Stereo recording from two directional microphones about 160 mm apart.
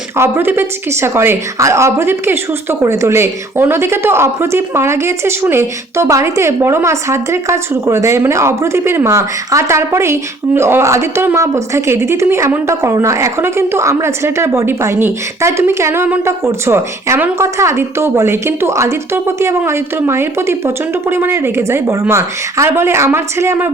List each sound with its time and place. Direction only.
0.2 s a woman's voice: 15° right (ahead or behind)